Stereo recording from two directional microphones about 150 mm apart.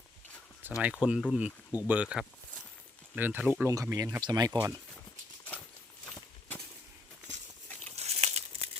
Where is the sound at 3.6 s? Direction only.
20° right (ahead or behind).